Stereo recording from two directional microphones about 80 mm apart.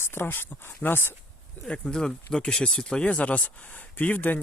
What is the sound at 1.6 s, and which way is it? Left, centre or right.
Speech, centre.